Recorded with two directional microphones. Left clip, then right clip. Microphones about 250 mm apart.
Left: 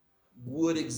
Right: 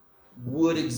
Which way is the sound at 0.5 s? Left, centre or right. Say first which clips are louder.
Right 5 dB; left.